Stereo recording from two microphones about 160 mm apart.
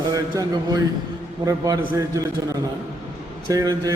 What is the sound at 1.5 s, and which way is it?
Speech, 20° right (ahead or behind).